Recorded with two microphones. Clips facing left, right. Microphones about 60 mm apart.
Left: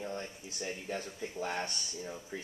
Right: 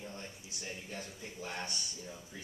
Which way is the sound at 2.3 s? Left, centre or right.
Left.